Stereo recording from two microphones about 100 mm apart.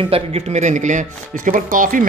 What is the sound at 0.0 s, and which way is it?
Speech, 75° right (ahead or behind).